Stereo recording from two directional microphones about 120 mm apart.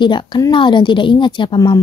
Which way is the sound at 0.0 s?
40° left (ahead or behind).